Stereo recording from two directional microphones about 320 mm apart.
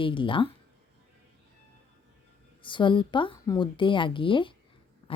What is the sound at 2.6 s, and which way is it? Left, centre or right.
A woman's voice, centre.